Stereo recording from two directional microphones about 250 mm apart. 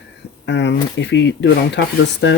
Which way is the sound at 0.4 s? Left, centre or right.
Left.